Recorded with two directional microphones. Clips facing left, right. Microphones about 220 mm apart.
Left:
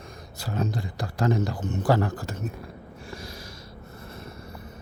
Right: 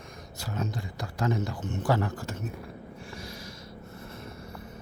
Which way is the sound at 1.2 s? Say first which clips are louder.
Left 4 dB; 35° left (ahead or behind).